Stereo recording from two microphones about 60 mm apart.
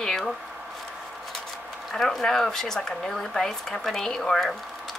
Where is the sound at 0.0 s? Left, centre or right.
Centre.